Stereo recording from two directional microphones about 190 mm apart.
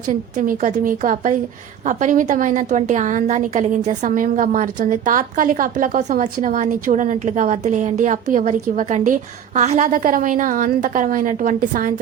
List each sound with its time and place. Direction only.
0.1 s a woman's voice: 45° right (ahead or behind)